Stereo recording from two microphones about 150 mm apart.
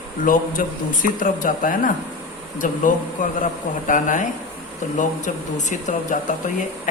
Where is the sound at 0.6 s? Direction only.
65° left (ahead or behind).